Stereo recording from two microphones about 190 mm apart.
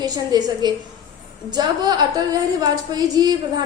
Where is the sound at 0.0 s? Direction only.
20° right (ahead or behind).